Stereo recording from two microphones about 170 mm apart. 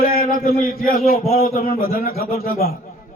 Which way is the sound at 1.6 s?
60° left (ahead or behind).